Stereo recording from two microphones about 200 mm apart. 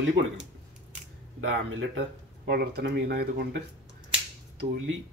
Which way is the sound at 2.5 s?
55° right (ahead or behind).